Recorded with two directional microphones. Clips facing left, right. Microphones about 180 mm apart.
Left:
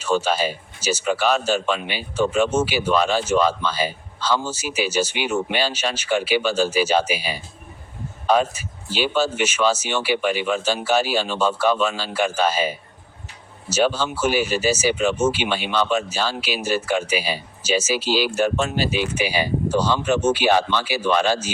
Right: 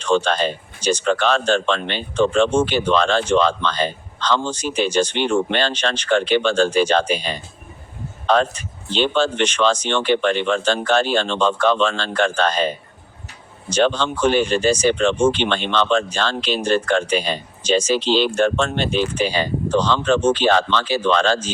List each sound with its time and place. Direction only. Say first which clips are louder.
0.0 s speech: right 2 dB; 5° left (ahead or behind)